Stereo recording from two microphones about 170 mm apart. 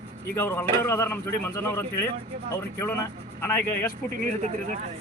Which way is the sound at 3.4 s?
10° left (ahead or behind).